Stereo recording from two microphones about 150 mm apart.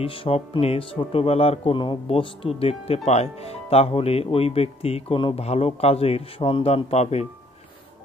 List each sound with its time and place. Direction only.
0.0 s speech: 40° left (ahead or behind)